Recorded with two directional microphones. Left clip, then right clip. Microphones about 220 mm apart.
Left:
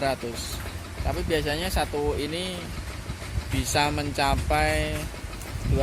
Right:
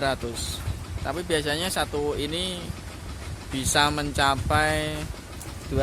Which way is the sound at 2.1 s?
40° right (ahead or behind).